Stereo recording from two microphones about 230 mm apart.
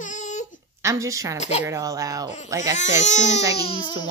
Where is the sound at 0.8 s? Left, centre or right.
Centre.